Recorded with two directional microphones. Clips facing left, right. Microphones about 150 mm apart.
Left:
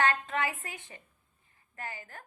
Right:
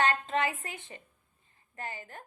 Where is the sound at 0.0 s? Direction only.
25° right (ahead or behind).